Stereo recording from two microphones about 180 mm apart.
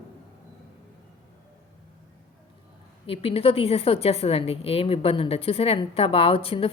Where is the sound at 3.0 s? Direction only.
35° left (ahead or behind).